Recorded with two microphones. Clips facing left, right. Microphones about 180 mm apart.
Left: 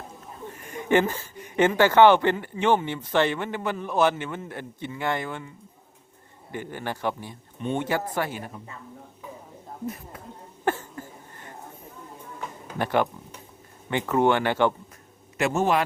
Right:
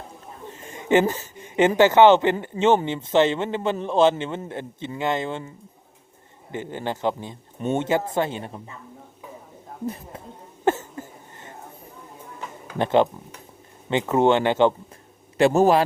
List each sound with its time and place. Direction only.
0.4 s a sound: 20° right (ahead or behind)
2.4 s a man's voice: 20° right (ahead or behind)
6.5 s a man's voice: 20° right (ahead or behind)
9.8 s a man's voice: 30° right (ahead or behind)
10.7 s a sound: 20° right (ahead or behind)
12.8 s a man's voice: 20° right (ahead or behind)
15.4 s a man's voice: 35° right (ahead or behind)